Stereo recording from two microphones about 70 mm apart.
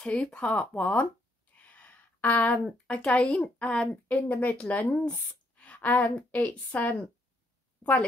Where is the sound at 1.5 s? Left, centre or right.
Left.